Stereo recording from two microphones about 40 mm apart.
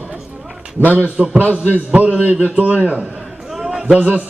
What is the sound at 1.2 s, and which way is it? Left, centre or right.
Speech, right.